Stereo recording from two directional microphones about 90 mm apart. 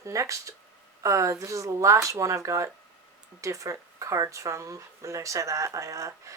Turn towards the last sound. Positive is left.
turn(degrees=-35)  # may be behind; listen again after turning